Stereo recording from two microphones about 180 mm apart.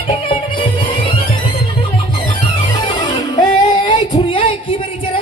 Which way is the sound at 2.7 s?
25° left (ahead or behind).